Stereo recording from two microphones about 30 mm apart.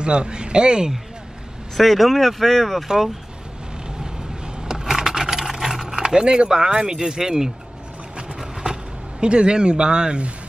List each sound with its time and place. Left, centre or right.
0.0 s speech: right
1.8 s speech: centre
4.6 s a sound: right
5.0 s vehicle: centre
5.9 s speech: right
8.6 s a sound: right
9.2 s speech: right